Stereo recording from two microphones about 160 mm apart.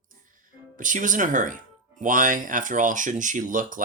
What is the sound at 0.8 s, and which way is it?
Speech, 55° right (ahead or behind).